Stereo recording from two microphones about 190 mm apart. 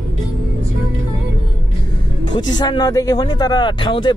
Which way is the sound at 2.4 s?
20° left (ahead or behind).